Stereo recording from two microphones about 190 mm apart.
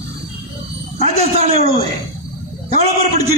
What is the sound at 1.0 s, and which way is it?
Speech, 35° right (ahead or behind).